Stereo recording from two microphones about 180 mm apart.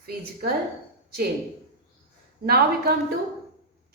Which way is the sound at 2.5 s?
60° right (ahead or behind).